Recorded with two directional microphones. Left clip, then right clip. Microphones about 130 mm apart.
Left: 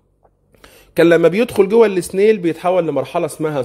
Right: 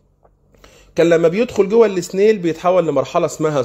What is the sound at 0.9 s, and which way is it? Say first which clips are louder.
A man's voice: left 2 dB; 25° left (ahead or behind).